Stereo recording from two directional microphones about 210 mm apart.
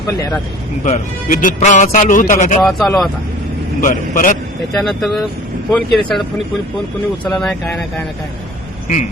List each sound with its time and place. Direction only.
0.9 s a man's voice: 40° left (ahead or behind)
2.6 s speech: centre (ahead or behind)
3.8 s a man's voice: 40° left (ahead or behind)
4.7 s speech: centre (ahead or behind)
7.3 s speech: 5° left (ahead or behind)